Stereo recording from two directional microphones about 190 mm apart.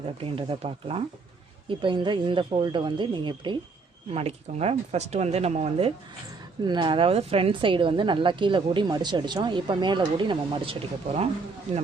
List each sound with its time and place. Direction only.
0.2 s a woman's voice: 30° right (ahead or behind)
6.6 s a woman's voice: 25° right (ahead or behind)